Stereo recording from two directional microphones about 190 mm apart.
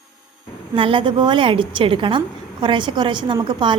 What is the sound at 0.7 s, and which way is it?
A woman's voice, 25° right (ahead or behind).